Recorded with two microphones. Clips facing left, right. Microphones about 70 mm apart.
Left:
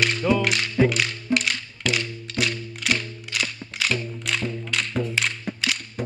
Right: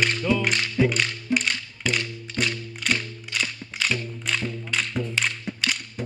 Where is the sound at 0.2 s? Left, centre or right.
Left.